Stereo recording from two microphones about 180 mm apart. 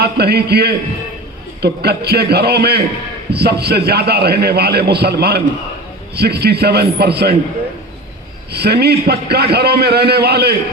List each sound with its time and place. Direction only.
0.0 s a man's voice: 65° right (ahead or behind)
8.5 s a man's voice: 65° right (ahead or behind)